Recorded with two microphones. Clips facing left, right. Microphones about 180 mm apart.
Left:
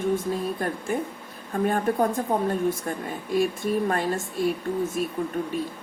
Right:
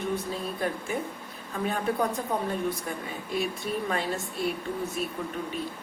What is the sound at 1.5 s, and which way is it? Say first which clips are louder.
Speech: left 5 dB; 50° left (ahead or behind).